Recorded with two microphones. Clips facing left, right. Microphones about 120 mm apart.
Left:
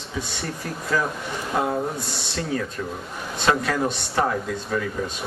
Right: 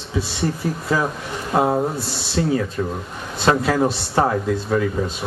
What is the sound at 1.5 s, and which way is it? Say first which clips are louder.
Speech: right 6 dB; 30° right (ahead or behind).